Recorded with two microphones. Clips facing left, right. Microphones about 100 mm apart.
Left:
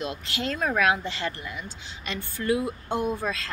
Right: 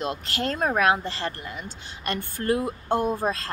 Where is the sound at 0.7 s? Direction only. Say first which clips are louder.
Right 2 dB; 35° right (ahead or behind).